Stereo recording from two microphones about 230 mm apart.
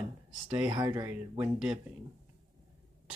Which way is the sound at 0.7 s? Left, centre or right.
Centre.